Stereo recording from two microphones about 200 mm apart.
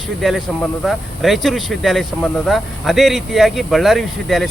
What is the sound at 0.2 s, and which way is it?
Speech, centre (ahead or behind).